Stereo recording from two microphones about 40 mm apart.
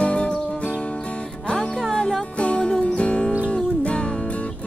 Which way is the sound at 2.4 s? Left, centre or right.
Left.